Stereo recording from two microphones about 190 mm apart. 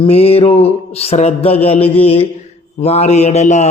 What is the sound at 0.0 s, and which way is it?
A man's voice, 30° left (ahead or behind).